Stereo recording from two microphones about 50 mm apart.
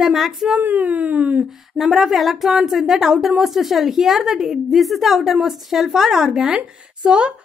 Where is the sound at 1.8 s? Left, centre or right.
Centre.